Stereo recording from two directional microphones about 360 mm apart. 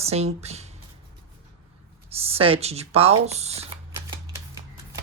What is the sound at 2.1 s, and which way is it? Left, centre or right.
Speech, centre.